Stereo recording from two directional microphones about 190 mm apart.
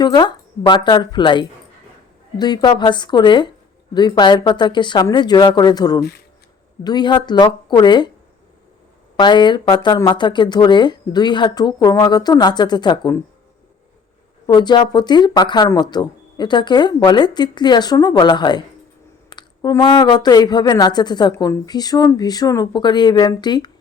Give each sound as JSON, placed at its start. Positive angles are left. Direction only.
{"t": 0.0, "sound": "a woman's voice", "side_deg": 25}
{"t": 9.1, "sound": "a woman's voice", "side_deg": 25}
{"t": 14.4, "sound": "a woman's voice", "side_deg": 25}